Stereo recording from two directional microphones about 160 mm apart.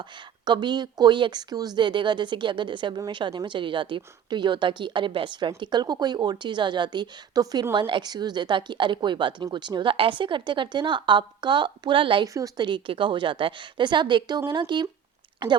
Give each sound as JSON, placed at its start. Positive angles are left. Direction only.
{"t": 0.4, "sound": "speech", "side_deg": -30}